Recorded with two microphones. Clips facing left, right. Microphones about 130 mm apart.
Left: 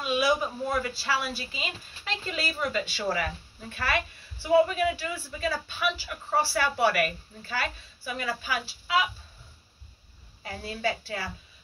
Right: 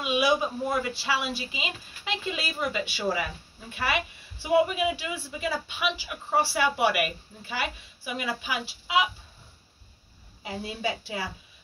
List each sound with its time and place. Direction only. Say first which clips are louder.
0.0 s speech: right 1 dB; 15° right (ahead or behind)
10.4 s speech: even; 15° right (ahead or behind)